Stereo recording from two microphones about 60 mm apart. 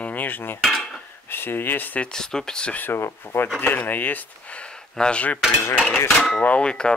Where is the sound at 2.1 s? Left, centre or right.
Centre.